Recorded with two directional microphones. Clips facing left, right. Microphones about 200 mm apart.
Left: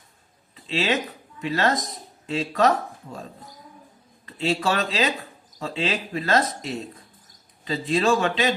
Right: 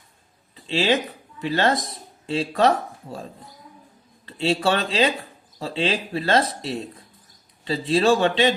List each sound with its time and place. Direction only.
0.5 s a sound: 30° right (ahead or behind)
1.4 s speech: 30° right (ahead or behind)
4.3 s speech: 30° right (ahead or behind)